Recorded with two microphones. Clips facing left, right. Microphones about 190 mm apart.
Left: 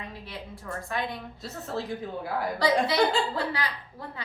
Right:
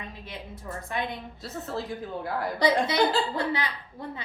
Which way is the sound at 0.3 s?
20° right (ahead or behind).